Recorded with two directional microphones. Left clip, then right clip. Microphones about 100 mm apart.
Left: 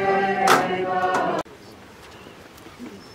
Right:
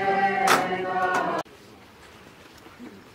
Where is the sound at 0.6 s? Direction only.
30° right (ahead or behind).